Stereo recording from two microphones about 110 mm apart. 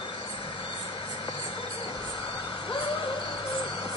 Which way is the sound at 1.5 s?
55° left (ahead or behind).